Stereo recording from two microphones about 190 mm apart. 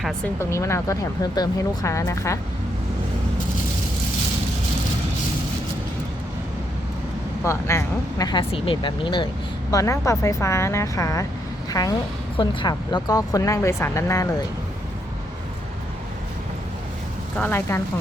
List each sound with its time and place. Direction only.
0.3 s speech: 15° left (ahead or behind)
7.4 s a woman's voice: 15° left (ahead or behind)
17.3 s speech: 10° left (ahead or behind)